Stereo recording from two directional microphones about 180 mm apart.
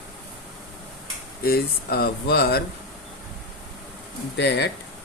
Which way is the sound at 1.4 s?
60° left (ahead or behind).